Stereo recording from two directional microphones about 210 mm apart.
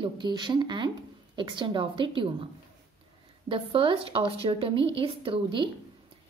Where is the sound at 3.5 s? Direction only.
25° right (ahead or behind).